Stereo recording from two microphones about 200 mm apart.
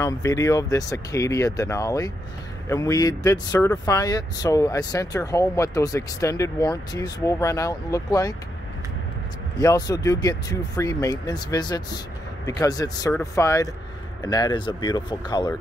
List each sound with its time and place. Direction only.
0.0 s speech: 15° left (ahead or behind)
9.6 s speech: 20° left (ahead or behind)